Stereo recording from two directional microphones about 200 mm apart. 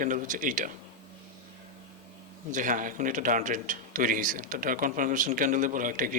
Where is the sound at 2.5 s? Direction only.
40° right (ahead or behind).